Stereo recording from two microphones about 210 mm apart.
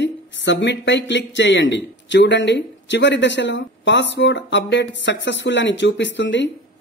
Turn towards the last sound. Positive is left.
turn(degrees=60)  # may be behind; listen again after turning